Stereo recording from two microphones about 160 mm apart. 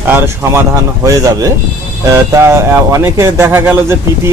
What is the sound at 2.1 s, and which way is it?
Speech, 20° right (ahead or behind).